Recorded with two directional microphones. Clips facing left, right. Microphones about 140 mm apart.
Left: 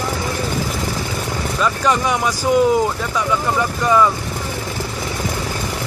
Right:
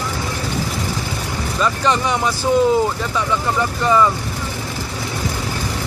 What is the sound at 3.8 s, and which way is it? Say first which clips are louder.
Speech: even; centre (ahead or behind).